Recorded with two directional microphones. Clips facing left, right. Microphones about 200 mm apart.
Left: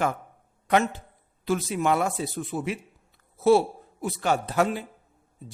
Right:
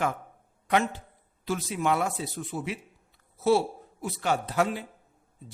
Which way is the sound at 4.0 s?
50° left (ahead or behind).